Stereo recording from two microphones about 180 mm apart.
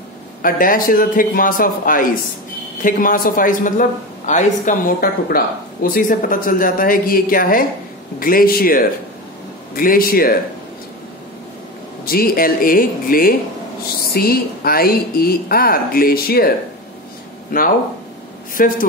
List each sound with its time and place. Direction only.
0.4 s speech: 50° left (ahead or behind)
12.1 s a woman's voice: 55° left (ahead or behind)